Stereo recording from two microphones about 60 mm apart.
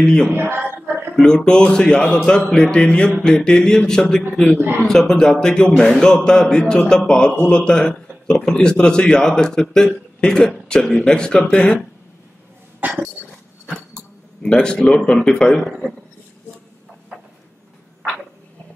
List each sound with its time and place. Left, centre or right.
0.0 s a man's voice: centre
0.3 s a sound: right
1.2 s a man's voice: centre
12.8 s cough: right
14.4 s a man's voice: centre